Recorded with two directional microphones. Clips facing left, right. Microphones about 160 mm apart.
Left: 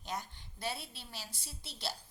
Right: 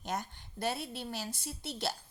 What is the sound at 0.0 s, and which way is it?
A woman's voice, 50° right (ahead or behind).